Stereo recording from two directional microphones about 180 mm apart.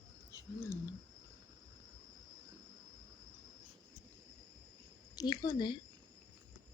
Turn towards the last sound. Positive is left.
turn(degrees=25)  # may be behind; listen again after turning